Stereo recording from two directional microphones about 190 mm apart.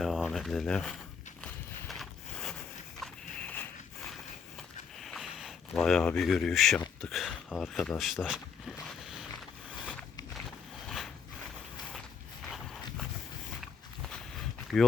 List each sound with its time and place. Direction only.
0.0 s speech: centre (ahead or behind)
1.9 s boat: centre (ahead or behind)
3.0 s a sound: 10° left (ahead or behind)
4.9 s speech: centre (ahead or behind)
10.8 s a sound: centre (ahead or behind)
14.7 s speech: centre (ahead or behind)